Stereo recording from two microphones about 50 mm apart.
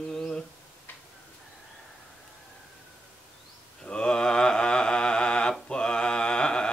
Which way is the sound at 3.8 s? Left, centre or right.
Centre.